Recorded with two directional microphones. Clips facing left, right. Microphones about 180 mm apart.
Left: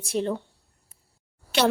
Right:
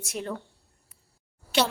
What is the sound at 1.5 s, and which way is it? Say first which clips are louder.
Speech: left 3 dB; 60° left (ahead or behind).